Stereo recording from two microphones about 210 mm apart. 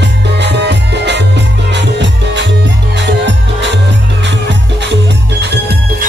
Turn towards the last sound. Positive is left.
turn(degrees=-50)  # may be behind; listen again after turning